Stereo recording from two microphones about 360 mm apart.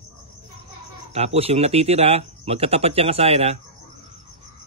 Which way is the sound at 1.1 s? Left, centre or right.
Centre.